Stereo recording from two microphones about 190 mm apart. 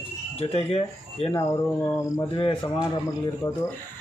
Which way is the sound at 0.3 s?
30° left (ahead or behind).